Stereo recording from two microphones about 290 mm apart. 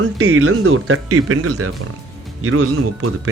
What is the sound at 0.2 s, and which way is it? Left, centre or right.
Speech, right.